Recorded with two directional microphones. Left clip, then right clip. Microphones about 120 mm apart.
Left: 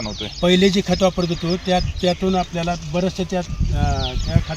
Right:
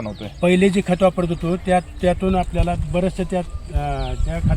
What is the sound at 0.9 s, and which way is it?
Speech, centre (ahead or behind).